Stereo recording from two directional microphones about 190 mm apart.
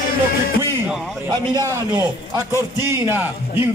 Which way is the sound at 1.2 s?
15° right (ahead or behind).